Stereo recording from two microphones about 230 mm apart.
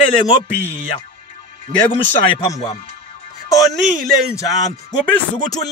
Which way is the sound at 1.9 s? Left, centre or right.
Left.